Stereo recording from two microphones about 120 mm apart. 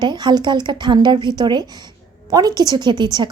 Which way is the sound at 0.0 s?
40° right (ahead or behind).